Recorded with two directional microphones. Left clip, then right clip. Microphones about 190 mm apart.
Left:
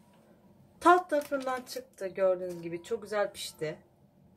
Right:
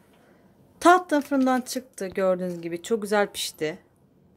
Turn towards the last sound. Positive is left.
turn(degrees=-55)  # may be behind; listen again after turning